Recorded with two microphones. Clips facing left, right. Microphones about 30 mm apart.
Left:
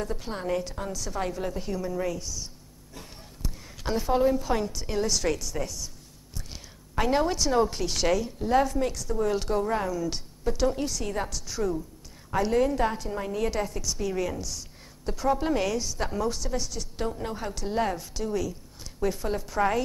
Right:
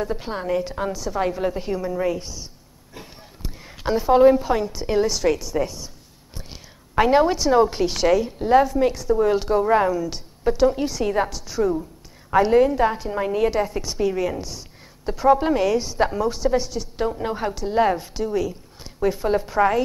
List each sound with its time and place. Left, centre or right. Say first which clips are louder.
0.0 s a woman's voice: right 6 dB; right
1.0 s a woman's voice: right 7 dB; centre
2.1 s a woman's voice: right 4 dB; right
2.4 s a sound: right 1 dB; right
4.2 s a woman's voice: right 12 dB; right
4.5 s a woman's voice: right 6 dB; centre
8.3 s a woman's voice: right 7 dB; right
12.6 s a woman's voice: right 6 dB; centre
13.7 s a woman's voice: right 7 dB; right
17.6 s a woman's voice: right 7 dB; centre
17.8 s a woman's voice: right 8 dB; right